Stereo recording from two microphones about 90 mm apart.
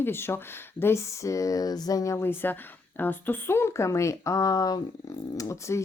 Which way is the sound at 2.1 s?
25° left (ahead or behind).